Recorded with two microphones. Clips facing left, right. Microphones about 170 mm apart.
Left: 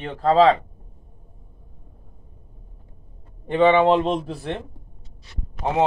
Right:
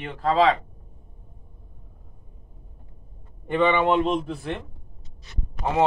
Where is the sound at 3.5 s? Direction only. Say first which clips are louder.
Left 4 dB; 30° left (ahead or behind).